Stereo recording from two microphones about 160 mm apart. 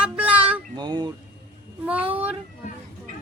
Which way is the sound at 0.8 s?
25° right (ahead or behind).